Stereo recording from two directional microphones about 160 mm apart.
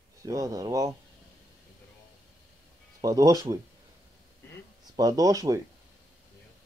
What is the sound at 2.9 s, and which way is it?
Speech, 20° right (ahead or behind).